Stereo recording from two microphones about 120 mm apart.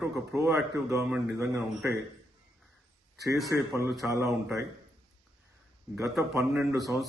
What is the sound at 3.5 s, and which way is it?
Speech, 25° right (ahead or behind).